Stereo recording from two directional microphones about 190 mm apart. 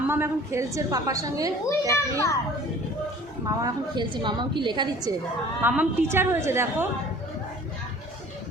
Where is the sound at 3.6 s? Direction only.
25° right (ahead or behind).